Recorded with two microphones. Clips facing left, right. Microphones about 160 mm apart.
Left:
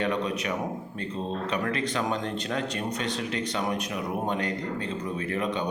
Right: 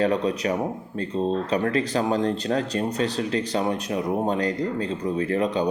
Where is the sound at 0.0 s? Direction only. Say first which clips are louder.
Right 6 dB; 35° right (ahead or behind).